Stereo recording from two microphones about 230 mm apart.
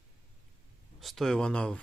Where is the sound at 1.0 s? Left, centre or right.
Centre.